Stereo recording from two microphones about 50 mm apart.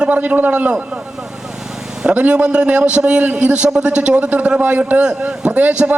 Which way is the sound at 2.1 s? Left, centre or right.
Right.